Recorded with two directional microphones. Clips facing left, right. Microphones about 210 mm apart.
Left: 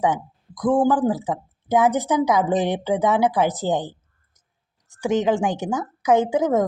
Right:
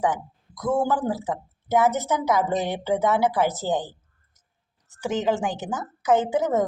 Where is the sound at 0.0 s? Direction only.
20° left (ahead or behind).